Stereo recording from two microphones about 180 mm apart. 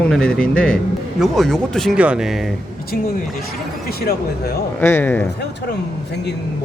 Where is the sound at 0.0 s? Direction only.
5° left (ahead or behind).